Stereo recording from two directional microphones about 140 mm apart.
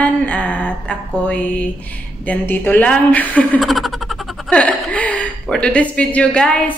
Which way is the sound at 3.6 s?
Centre (ahead or behind).